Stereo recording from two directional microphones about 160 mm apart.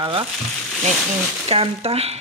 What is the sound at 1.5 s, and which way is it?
Frying, 40° right (ahead or behind).